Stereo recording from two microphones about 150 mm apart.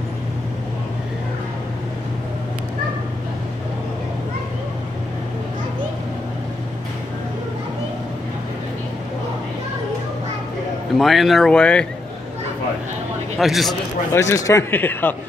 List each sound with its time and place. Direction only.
11.0 s speech: centre (ahead or behind)
13.4 s speech: centre (ahead or behind)
14.1 s a man's voice: 20° left (ahead or behind)